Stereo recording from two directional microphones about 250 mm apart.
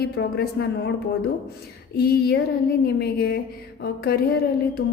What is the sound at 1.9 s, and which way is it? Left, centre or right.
Speech, left.